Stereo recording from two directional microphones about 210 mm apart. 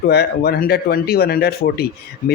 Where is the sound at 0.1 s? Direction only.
50° left (ahead or behind).